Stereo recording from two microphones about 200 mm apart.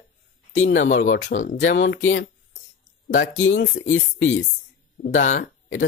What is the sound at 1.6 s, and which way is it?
Speech, 70° left (ahead or behind).